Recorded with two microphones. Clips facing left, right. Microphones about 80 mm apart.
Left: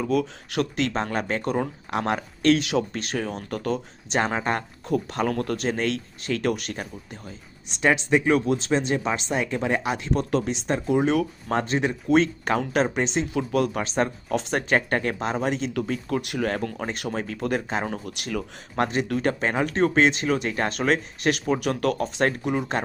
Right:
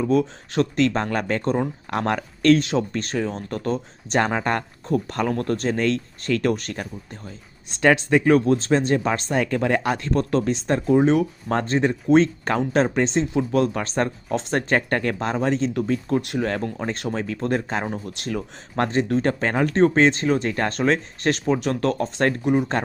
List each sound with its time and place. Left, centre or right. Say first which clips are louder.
0.0 s speech: right 4 dB; right
4.2 s speech: right 2 dB; right
7.8 s speech: right 3 dB; right
8.4 s speech: right 4 dB; right
17.8 s speech: right 2 dB; right
18.8 s speech: right 3 dB; right